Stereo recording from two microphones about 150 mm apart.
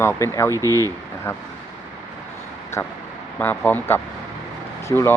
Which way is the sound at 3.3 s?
10° left (ahead or behind).